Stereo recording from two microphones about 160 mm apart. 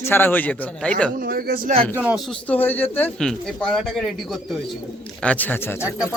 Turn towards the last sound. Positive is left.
turn(degrees=15)  # may be behind; listen again after turning